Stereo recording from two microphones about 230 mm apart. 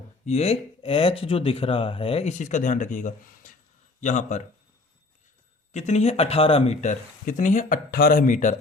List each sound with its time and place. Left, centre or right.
0.3 s speech: left
5.7 s speech: left